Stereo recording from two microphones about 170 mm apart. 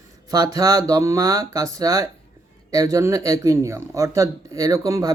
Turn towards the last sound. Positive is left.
turn(degrees=-20)  # may be behind; listen again after turning